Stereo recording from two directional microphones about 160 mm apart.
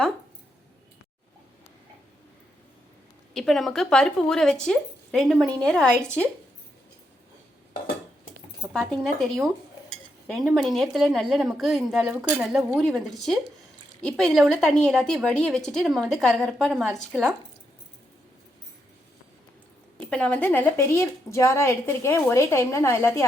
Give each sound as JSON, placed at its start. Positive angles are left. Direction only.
{"t": 3.3, "sound": "speech", "side_deg": 0}
{"t": 8.9, "sound": "speech", "side_deg": 0}
{"t": 20.0, "sound": "a woman's voice", "side_deg": 5}